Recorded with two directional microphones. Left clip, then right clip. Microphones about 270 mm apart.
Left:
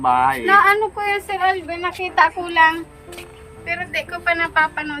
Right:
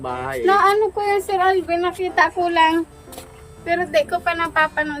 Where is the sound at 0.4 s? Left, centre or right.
Centre.